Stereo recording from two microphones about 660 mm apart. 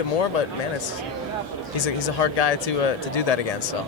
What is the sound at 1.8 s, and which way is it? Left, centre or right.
Speech, left.